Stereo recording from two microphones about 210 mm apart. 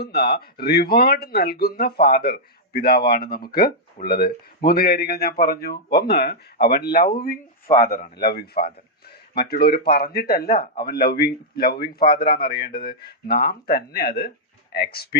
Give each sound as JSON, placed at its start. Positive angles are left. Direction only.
{"t": 0.0, "sound": "speech", "side_deg": 50}